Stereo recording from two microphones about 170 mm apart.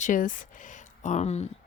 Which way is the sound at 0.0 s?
50° left (ahead or behind).